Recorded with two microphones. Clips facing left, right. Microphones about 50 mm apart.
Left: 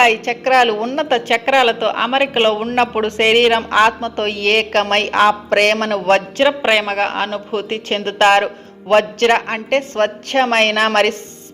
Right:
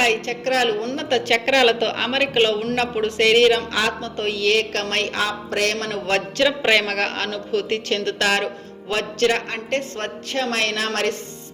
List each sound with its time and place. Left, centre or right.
0.0 s a woman's voice: left
1.3 s a woman's voice: centre; by 6.2 s left
6.6 s a woman's voice: centre; by 11.1 s left